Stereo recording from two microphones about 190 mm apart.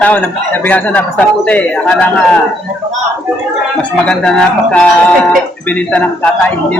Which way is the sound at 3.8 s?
5° left (ahead or behind).